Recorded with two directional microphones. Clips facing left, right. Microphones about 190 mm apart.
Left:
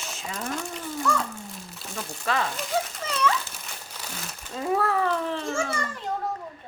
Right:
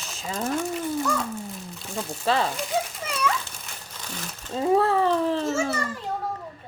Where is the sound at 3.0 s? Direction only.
10° right (ahead or behind).